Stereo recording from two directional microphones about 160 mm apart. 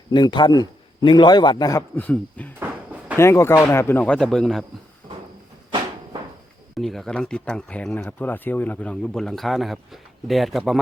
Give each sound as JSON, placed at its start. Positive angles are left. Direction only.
{"t": 0.1, "sound": "a man's voice", "side_deg": 30}
{"t": 2.0, "sound": "speech", "side_deg": 10}
{"t": 2.6, "sound": "a sound", "side_deg": -10}
{"t": 3.2, "sound": "speech", "side_deg": 15}
{"t": 6.7, "sound": "speech", "side_deg": 0}